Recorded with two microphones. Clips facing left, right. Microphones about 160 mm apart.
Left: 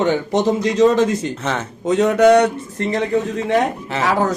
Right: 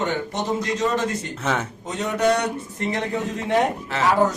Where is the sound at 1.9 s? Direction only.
90° left.